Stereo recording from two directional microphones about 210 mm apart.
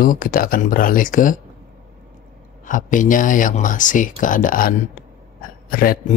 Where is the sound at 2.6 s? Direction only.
40° left (ahead or behind).